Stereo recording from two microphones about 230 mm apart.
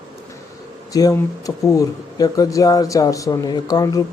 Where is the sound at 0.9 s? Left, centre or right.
Centre.